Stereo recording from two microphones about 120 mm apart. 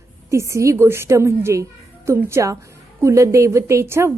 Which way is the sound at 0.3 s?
25° right (ahead or behind).